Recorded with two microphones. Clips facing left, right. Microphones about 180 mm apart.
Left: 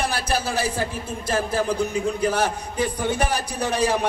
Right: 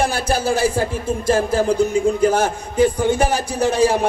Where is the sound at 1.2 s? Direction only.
25° right (ahead or behind).